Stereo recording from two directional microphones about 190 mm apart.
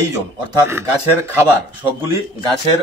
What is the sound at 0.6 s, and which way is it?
Speech, 15° right (ahead or behind).